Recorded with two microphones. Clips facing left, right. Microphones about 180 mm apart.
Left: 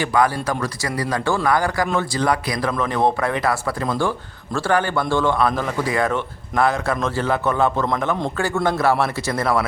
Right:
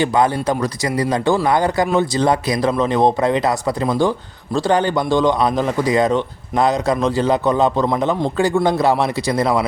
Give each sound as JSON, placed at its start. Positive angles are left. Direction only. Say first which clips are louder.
{"t": 0.0, "sound": "a man's voice", "louder": "right 3 dB", "side_deg": -20}